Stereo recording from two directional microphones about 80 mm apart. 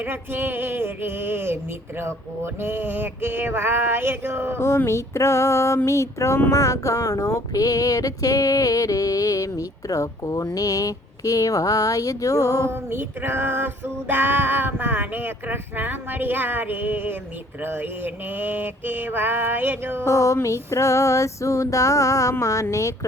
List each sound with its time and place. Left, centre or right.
0.0 s music: right
4.9 s music: left
12.9 s music: right
20.1 s female singing: left